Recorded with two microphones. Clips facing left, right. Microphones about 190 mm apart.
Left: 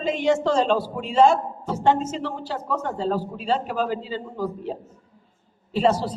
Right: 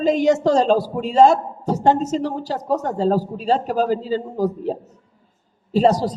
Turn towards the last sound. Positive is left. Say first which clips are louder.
# right 4 dB
turn(degrees=-40)  # may be behind; listen again after turning